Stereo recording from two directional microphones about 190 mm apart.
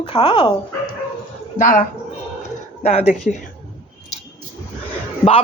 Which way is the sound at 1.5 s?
45° left (ahead or behind).